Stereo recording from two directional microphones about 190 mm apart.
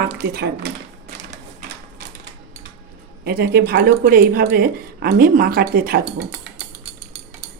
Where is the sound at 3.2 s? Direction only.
55° right (ahead or behind).